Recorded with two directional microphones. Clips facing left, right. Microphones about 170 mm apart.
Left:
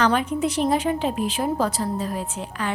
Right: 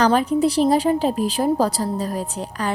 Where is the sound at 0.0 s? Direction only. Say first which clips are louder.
Right 4 dB; 35° right (ahead or behind).